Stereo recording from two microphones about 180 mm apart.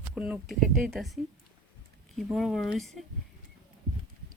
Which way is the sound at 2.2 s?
Centre (ahead or behind).